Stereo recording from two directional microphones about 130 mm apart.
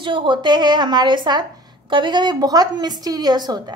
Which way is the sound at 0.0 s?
40° right (ahead or behind).